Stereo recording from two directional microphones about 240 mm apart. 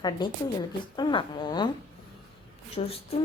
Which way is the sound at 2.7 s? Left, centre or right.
Left.